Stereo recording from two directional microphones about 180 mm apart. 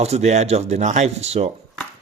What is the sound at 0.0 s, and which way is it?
Speech, 35° right (ahead or behind).